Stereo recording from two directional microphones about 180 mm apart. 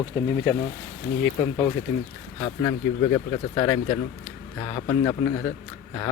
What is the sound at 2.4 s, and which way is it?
Speech, 20° left (ahead or behind).